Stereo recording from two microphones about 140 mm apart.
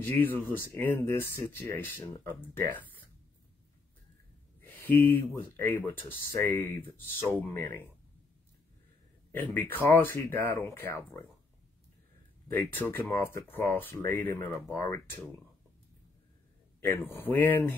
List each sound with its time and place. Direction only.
0.0 s speech: 15° left (ahead or behind)
4.6 s speech: 15° left (ahead or behind)
9.3 s speech: 15° left (ahead or behind)
12.4 s speech: 15° left (ahead or behind)
17.0 s speech: 15° left (ahead or behind)